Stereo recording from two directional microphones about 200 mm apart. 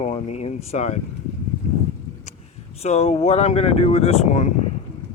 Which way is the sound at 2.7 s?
30° left (ahead or behind).